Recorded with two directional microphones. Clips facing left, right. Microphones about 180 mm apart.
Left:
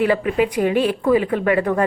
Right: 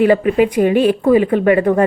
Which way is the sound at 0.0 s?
25° right (ahead or behind).